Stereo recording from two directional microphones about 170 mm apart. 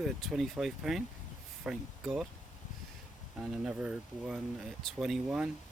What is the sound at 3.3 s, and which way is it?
Speech, 5° right (ahead or behind).